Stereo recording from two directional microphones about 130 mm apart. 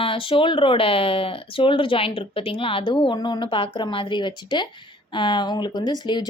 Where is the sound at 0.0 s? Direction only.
45° left (ahead or behind).